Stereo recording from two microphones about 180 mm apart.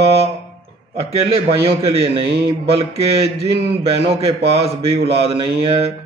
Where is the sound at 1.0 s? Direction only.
35° right (ahead or behind).